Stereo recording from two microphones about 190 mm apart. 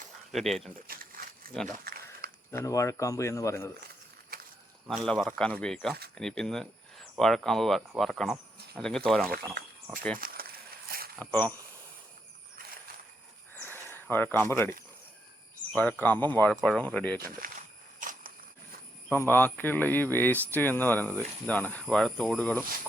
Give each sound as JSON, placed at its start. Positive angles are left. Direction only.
{"t": 0.3, "sound": "speech", "side_deg": 0}
{"t": 0.9, "sound": "crumpling", "side_deg": -50}
{"t": 1.8, "sound": "a sound", "side_deg": -55}
{"t": 2.5, "sound": "speech", "side_deg": 15}
{"t": 4.3, "sound": "snake", "side_deg": -55}
{"t": 4.9, "sound": "speech", "side_deg": 5}
{"t": 10.2, "sound": "a sound", "side_deg": -50}
{"t": 11.2, "sound": "speech", "side_deg": 10}
{"t": 13.6, "sound": "a sound", "side_deg": 10}
{"t": 13.9, "sound": "speech", "side_deg": 10}
{"t": 17.2, "sound": "speech", "side_deg": -50}
{"t": 18.0, "sound": "a sound", "side_deg": -45}
{"t": 19.3, "sound": "speech", "side_deg": 10}